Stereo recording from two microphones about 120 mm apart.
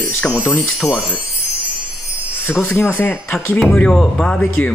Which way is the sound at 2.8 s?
15° left (ahead or behind).